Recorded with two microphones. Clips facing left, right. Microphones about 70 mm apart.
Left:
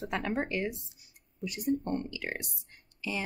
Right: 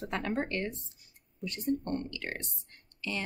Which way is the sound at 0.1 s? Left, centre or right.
Centre.